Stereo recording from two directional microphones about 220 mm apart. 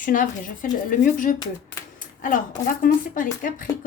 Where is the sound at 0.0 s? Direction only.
40° left (ahead or behind).